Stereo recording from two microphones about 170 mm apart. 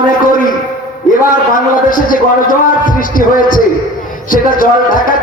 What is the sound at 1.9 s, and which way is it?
A man's voice, 50° left (ahead or behind).